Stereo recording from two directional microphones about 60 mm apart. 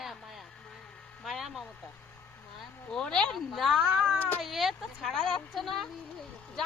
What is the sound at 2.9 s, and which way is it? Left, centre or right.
Speech, centre.